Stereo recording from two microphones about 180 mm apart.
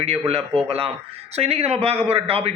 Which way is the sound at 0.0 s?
35° right (ahead or behind).